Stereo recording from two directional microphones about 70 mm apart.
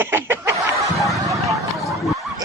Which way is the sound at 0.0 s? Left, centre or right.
Right.